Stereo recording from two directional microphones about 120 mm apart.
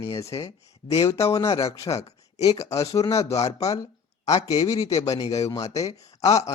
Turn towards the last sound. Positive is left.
turn(degrees=30)  # may be behind; listen again after turning